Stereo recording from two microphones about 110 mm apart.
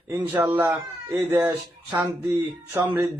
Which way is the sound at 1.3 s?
15° right (ahead or behind).